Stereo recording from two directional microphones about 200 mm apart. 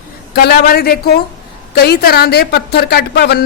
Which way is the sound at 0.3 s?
50° left (ahead or behind).